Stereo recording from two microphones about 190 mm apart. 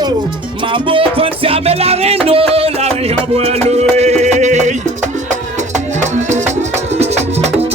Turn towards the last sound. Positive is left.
turn(degrees=-35)  # may be behind; listen again after turning